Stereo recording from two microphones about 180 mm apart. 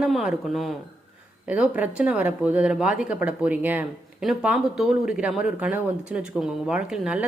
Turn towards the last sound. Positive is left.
turn(degrees=-5)  # may be behind; listen again after turning